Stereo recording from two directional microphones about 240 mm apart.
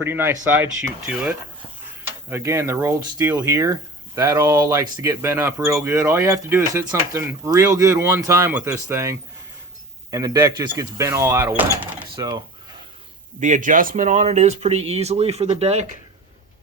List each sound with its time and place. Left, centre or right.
0.0 s speech: centre
13.4 s speech: right